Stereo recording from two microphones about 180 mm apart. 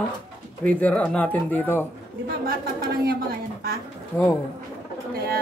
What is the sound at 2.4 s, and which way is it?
Speech, 55° right (ahead or behind).